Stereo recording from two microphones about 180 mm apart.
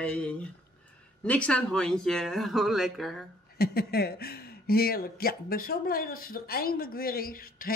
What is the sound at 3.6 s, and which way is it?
Speech, 60° left (ahead or behind).